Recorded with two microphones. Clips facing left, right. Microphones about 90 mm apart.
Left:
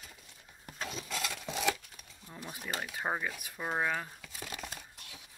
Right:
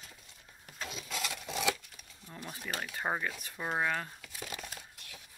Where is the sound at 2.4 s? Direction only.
10° left (ahead or behind).